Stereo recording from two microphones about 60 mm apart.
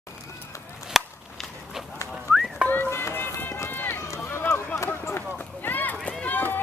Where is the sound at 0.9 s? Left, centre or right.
Centre.